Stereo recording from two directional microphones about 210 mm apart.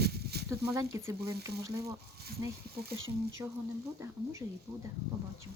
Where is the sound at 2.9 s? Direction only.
65° right (ahead or behind).